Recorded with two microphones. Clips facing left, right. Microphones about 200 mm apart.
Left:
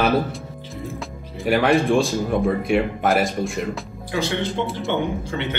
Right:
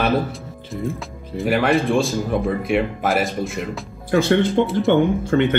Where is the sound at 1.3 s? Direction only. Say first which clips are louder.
Even; centre (ahead or behind).